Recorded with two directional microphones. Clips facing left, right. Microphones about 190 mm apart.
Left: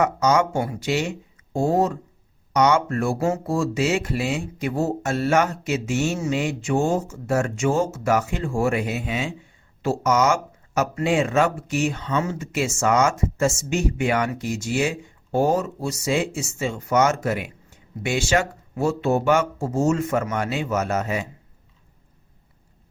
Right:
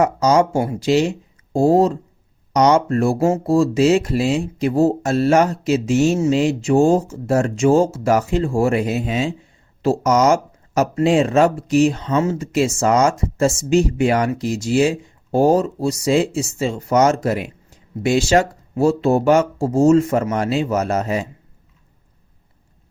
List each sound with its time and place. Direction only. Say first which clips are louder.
0.0 s speech: right 4 dB; 35° right (ahead or behind)